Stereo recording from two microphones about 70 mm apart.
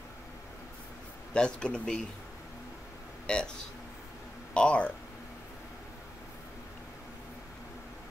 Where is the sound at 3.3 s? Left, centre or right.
Centre.